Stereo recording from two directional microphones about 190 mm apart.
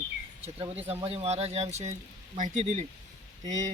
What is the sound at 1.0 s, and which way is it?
Speech, 30° right (ahead or behind).